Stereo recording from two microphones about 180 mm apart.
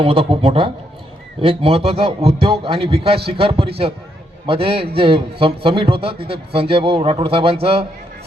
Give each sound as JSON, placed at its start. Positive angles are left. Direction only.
{"t": 0.0, "sound": "a man's voice", "side_deg": -30}